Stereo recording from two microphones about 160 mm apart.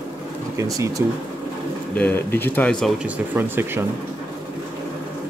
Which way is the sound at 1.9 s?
10° left (ahead or behind).